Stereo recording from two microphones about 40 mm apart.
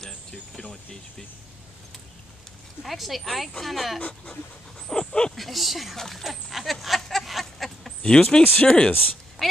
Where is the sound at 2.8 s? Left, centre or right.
Centre.